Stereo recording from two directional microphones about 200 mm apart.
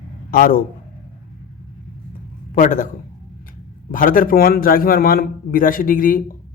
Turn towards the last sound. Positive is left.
turn(degrees=45)  # may be behind; listen again after turning